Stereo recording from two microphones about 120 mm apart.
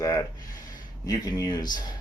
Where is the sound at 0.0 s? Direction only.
30° left (ahead or behind).